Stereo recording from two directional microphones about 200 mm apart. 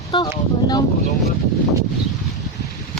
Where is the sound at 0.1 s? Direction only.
25° left (ahead or behind).